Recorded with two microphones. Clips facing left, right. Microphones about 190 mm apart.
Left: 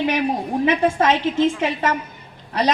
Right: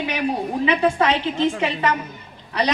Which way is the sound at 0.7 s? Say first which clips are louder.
Left 1 dB; 65° right (ahead or behind).